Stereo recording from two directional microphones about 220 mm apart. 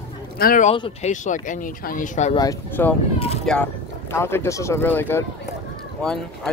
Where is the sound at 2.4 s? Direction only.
10° left (ahead or behind).